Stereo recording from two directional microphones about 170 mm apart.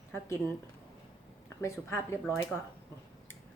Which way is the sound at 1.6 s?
15° left (ahead or behind).